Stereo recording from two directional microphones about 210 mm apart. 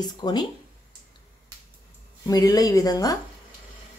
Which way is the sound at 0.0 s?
20° left (ahead or behind).